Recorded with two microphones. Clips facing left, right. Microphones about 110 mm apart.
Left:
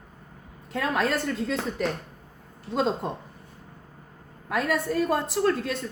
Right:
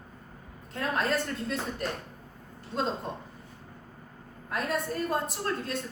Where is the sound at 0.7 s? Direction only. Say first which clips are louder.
Left 3 dB; 90° left.